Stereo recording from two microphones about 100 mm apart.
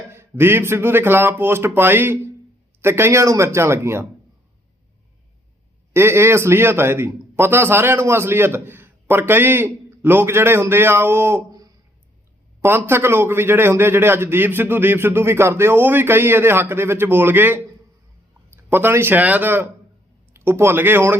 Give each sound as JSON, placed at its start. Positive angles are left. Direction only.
{"t": 0.1, "sound": "a man's voice", "side_deg": -25}
{"t": 5.9, "sound": "a man's voice", "side_deg": -25}
{"t": 12.6, "sound": "a man's voice", "side_deg": -25}